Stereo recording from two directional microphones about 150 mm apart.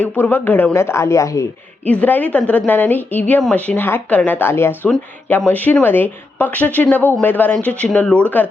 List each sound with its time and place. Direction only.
0.0 s speech: 15° left (ahead or behind)